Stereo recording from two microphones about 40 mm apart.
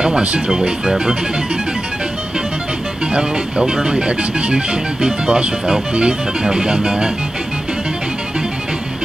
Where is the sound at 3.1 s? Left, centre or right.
Centre.